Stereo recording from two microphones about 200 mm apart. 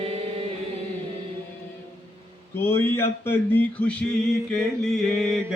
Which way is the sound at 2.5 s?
10° left (ahead or behind).